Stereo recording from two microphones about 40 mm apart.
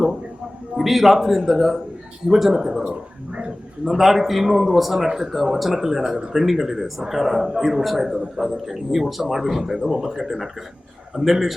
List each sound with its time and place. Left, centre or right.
0.8 s a man's voice: centre
2.8 s speech: right
3.8 s a man's voice: centre